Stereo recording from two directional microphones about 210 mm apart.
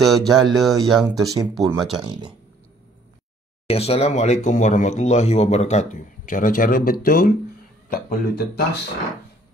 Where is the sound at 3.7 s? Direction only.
30° left (ahead or behind).